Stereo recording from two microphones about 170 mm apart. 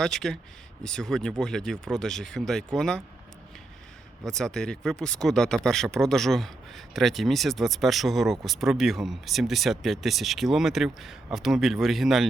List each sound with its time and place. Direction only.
0.0 s speech: centre (ahead or behind)
4.3 s speech: 5° left (ahead or behind)